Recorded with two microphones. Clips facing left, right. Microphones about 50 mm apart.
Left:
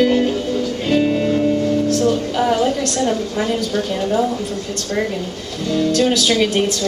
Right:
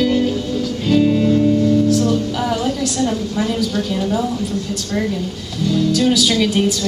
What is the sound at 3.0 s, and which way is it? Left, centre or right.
Speech, centre.